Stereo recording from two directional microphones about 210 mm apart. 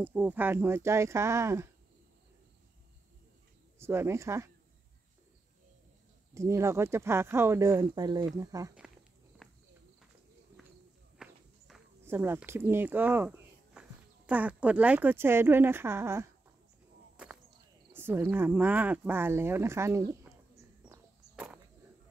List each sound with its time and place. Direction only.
0.0 s speech: 10° right (ahead or behind)
3.7 s speech: 10° right (ahead or behind)
6.3 s speech: 15° right (ahead or behind)
9.4 s walk: centre (ahead or behind)
11.1 s speech: centre (ahead or behind)
17.9 s speech: 10° right (ahead or behind)
20.8 s walk: 5° right (ahead or behind)